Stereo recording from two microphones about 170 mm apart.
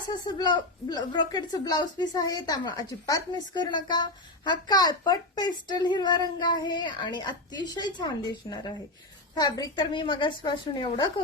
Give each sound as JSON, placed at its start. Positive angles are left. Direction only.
{"t": 0.1, "sound": "a woman's voice", "side_deg": 25}